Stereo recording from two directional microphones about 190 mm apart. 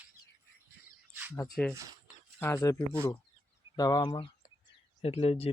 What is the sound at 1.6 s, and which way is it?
Speech, 5° left (ahead or behind).